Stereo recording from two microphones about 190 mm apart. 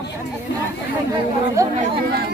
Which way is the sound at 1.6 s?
15° right (ahead or behind).